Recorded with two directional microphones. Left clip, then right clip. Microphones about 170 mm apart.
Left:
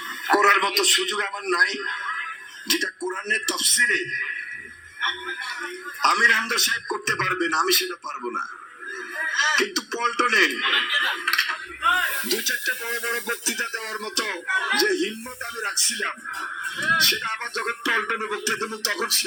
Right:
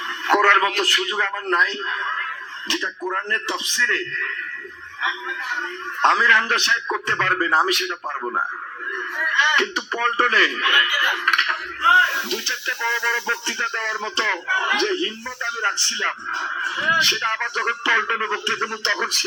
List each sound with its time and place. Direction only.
0.3 s a man's voice: 30° right (ahead or behind)
6.0 s a man's voice: 30° right (ahead or behind)